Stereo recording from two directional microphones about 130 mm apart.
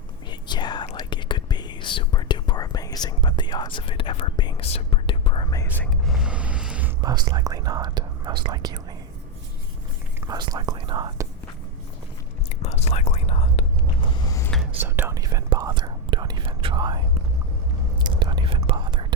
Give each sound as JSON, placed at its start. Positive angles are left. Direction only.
{"t": 0.3, "sound": "whispering", "side_deg": 35}
{"t": 5.8, "sound": "a sound", "side_deg": 0}
{"t": 7.0, "sound": "whispering", "side_deg": -30}
{"t": 10.2, "sound": "whispering", "side_deg": -30}
{"t": 12.6, "sound": "whispering", "side_deg": 55}
{"t": 14.0, "sound": "a sound", "side_deg": 35}
{"t": 14.8, "sound": "whispering", "side_deg": -15}
{"t": 15.1, "sound": "whispering", "side_deg": -25}
{"t": 18.0, "sound": "whispering", "side_deg": -35}